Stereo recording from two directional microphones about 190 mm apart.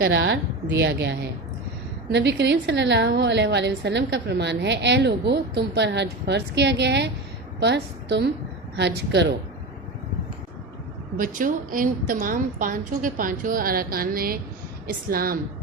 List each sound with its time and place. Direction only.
0.0 s a woman's voice: 75° right (ahead or behind)
0.8 s a woman's voice: 65° right (ahead or behind)
11.2 s a woman's voice: 45° right (ahead or behind)